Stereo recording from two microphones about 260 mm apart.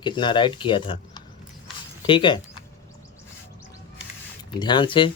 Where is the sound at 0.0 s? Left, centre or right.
Centre.